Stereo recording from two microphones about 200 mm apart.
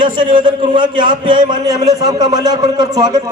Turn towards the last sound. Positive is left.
turn(degrees=-20)  # may be behind; listen again after turning